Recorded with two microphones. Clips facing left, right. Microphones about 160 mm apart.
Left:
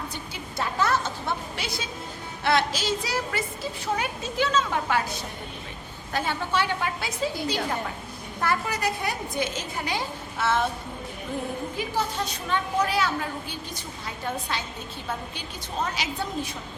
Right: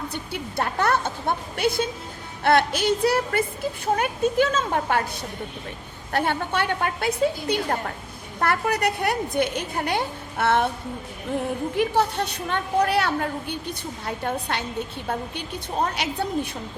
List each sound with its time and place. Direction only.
0.1 s a woman's voice: 60° right (ahead or behind)
6.1 s a woman's voice: 60° right (ahead or behind)
11.8 s a woman's voice: 65° right (ahead or behind)